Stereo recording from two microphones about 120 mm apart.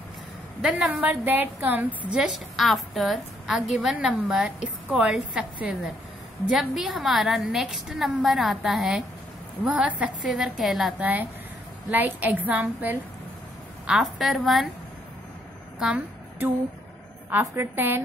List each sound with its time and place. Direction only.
0.6 s a woman's voice: 5° right (ahead or behind)
1.0 s a woman's voice: 15° right (ahead or behind)
2.1 s a woman's voice: 5° right (ahead or behind)
11.9 s a woman's voice: 15° right (ahead or behind)
13.8 s a woman's voice: centre (ahead or behind)
17.3 s a woman's voice: 20° right (ahead or behind)